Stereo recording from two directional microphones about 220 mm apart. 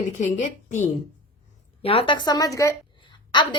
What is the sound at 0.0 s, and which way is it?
A woman's voice, 35° left (ahead or behind).